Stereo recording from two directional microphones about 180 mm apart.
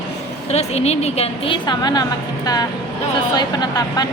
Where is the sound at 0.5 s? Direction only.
35° left (ahead or behind).